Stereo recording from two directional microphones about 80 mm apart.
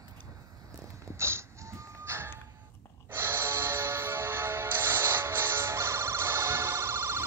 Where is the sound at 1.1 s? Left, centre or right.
Right.